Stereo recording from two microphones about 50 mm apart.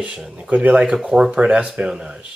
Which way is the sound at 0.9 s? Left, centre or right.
Centre.